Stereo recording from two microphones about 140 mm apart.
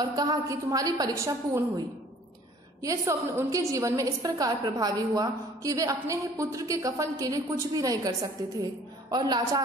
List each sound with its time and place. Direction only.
0.1 s a woman's voice: 25° right (ahead or behind)
2.8 s a woman's voice: 20° right (ahead or behind)